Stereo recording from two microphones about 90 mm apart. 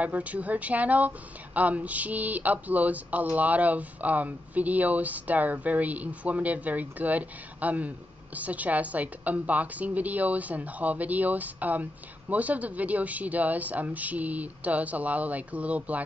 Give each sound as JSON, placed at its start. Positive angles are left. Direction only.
{"t": 0.0, "sound": "speech", "side_deg": -15}